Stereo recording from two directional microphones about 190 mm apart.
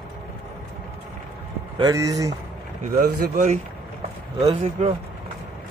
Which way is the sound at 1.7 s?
20° right (ahead or behind).